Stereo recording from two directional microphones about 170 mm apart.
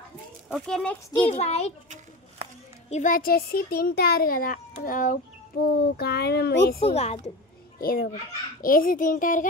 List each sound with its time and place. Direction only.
0.5 s speech: 5° left (ahead or behind)
1.2 s a child's voice: 40° left (ahead or behind)
2.9 s a child's voice: 50° left (ahead or behind)
5.8 s speech: 70° left (ahead or behind)
6.8 s a child's voice: 40° left (ahead or behind)
7.8 s a child's voice: 60° left (ahead or behind)